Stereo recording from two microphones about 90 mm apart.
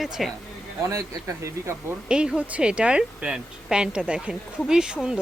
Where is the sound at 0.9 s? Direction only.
30° right (ahead or behind).